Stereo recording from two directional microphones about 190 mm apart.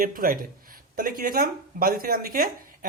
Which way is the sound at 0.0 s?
50° right (ahead or behind).